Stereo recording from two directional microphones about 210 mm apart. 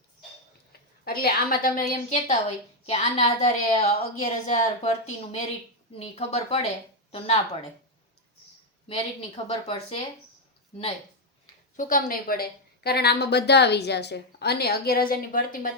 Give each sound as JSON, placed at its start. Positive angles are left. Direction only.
{"t": 1.0, "sound": "a woman's voice", "side_deg": 45}
{"t": 9.3, "sound": "speech", "side_deg": 30}
{"t": 11.8, "sound": "a woman's voice", "side_deg": 40}